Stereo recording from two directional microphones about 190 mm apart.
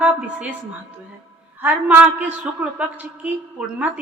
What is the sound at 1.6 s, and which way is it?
A woman's voice, 10° right (ahead or behind).